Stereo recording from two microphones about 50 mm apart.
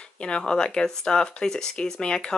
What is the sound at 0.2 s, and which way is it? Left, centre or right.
Speech, centre.